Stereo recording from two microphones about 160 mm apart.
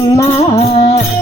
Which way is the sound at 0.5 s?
45° left (ahead or behind).